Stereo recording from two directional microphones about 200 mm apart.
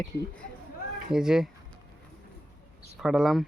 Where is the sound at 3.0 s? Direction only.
Centre (ahead or behind).